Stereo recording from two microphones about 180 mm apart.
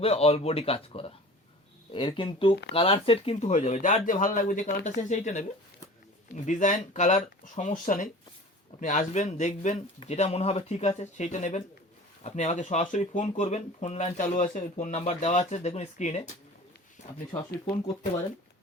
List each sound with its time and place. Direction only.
0.0 s speech: 35° left (ahead or behind)